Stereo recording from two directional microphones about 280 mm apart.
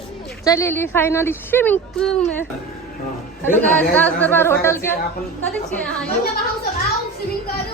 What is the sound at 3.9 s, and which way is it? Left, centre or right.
A woman's voice, centre.